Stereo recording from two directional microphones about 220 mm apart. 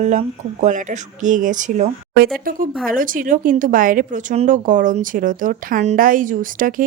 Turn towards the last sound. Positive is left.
turn(degrees=-40)  # may be behind; listen again after turning